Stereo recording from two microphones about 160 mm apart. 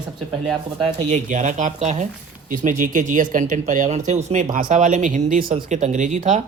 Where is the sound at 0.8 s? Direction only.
45° right (ahead or behind).